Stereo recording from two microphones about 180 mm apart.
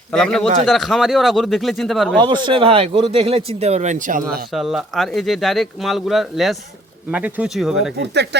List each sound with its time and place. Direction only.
0.1 s speech: 5° left (ahead or behind)
2.1 s speech: 25° right (ahead or behind); by 4.4 s 45° right (ahead or behind)
4.5 s speech: centre (ahead or behind)
7.9 s speech: 70° right (ahead or behind)